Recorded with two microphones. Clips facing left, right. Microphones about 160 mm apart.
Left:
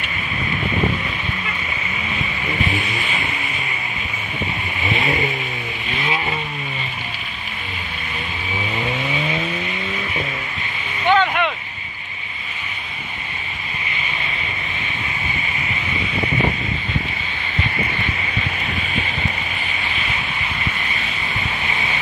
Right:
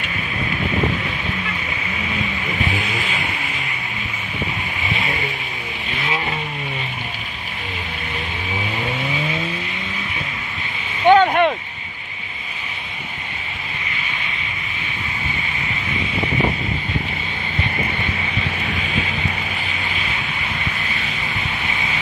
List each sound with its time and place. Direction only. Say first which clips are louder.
11.1 s vehicle: right 5 dB; 45° right (ahead or behind)